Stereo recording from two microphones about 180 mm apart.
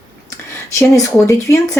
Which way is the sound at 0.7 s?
15° left (ahead or behind).